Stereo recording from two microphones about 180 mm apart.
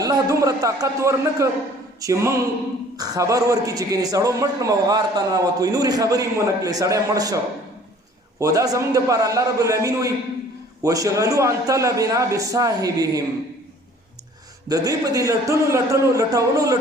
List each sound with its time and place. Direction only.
0.0 s a man's voice: 20° right (ahead or behind)
8.4 s a man's voice: 20° right (ahead or behind)
14.7 s a man's voice: 20° right (ahead or behind)